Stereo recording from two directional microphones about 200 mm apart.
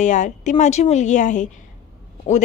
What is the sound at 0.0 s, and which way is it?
A woman's voice, 35° left (ahead or behind).